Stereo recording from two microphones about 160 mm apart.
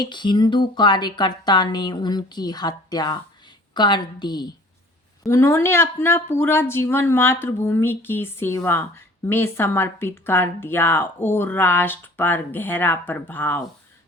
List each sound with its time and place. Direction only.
0.0 s a woman's voice: 30° left (ahead or behind); by 13.6 s 10° left (ahead or behind)